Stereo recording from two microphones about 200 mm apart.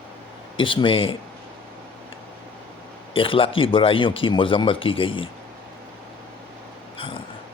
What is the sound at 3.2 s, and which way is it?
Speech, 25° left (ahead or behind).